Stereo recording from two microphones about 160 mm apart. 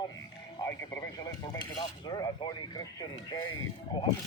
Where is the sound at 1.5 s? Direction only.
25° left (ahead or behind).